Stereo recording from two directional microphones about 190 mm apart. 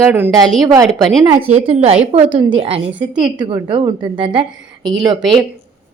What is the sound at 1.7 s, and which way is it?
Speech, 35° right (ahead or behind).